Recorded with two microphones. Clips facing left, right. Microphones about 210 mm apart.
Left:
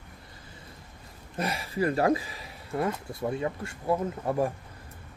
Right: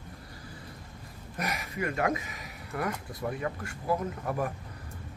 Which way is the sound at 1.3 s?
30° left (ahead or behind).